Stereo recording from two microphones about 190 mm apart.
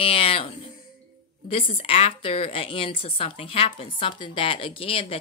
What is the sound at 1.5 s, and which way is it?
A woman's voice, 30° left (ahead or behind).